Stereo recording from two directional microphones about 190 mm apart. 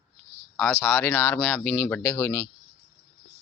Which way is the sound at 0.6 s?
10° left (ahead or behind).